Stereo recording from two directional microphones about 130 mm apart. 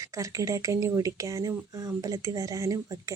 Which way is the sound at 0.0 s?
25° right (ahead or behind).